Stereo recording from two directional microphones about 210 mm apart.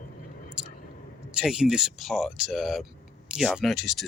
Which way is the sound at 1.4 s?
Centre (ahead or behind).